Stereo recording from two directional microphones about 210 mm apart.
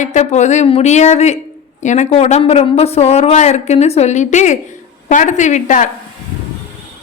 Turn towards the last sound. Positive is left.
turn(degrees=35)  # may be behind; listen again after turning